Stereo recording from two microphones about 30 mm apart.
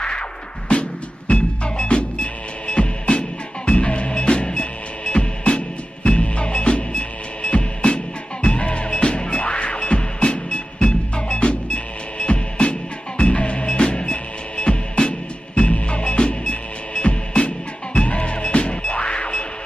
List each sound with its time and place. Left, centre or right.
0.7 s music: left
13.7 s music: left
16.0 s music: left
17.9 s music: left